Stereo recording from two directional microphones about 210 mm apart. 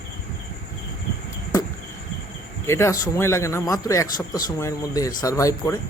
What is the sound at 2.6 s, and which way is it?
A man's voice, 15° left (ahead or behind).